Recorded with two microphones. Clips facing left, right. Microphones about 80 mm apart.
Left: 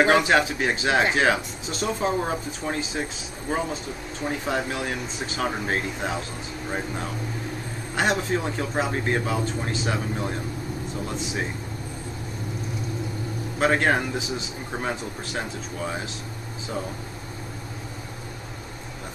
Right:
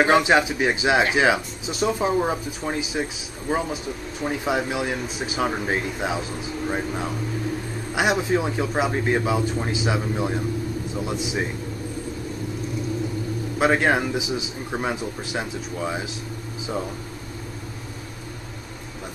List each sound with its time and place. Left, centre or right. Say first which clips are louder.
0.0 s speech: right 1 dB; centre
7.9 s speech: right 2 dB; centre
13.6 s speech: right 2 dB; centre